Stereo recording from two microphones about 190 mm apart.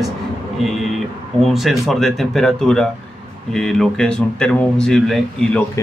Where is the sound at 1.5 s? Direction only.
Centre (ahead or behind).